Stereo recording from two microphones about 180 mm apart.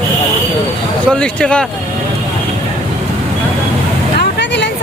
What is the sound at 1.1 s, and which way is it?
Speech, 5° left (ahead or behind).